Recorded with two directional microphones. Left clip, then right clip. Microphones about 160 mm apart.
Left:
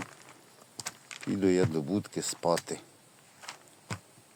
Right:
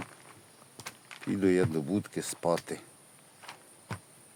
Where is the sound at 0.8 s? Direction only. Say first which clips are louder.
Left 3 dB; 90° left.